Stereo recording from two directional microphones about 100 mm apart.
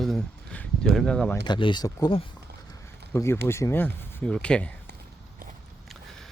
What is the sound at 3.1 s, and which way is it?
Speech, 25° left (ahead or behind).